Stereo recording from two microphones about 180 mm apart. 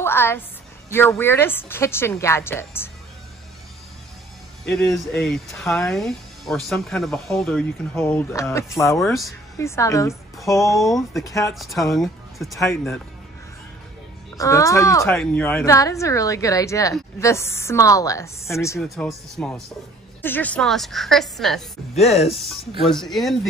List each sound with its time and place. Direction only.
0.0 s a woman's voice: 15° left (ahead or behind)
4.6 s a woman's voice: centre (ahead or behind)
10.9 s a woman's voice: centre (ahead or behind)
11.2 s speech: 20° left (ahead or behind)
11.5 s a woman's voice: centre (ahead or behind)
14.3 s speech: 20° left (ahead or behind)
18.8 s a woman's voice: 5° left (ahead or behind)
21.9 s speech: 35° left (ahead or behind)
22.3 s a woman's voice: centre (ahead or behind)